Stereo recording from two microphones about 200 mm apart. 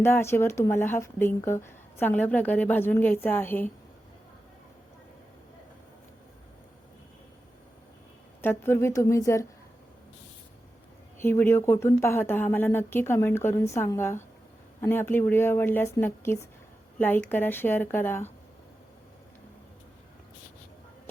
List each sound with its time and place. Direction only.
0.0 s speech: 10° left (ahead or behind)
8.4 s speech: 10° left (ahead or behind)
11.2 s speech: 10° left (ahead or behind)